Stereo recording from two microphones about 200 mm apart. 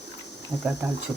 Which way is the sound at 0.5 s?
15° right (ahead or behind).